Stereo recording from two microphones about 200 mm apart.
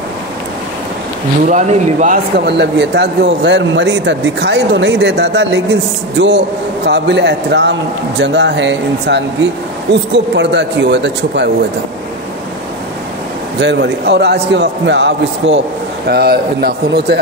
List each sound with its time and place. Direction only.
1.5 s speech: 35° right (ahead or behind)
2.3 s speech: 55° right (ahead or behind)
13.6 s a man's voice: 60° right (ahead or behind)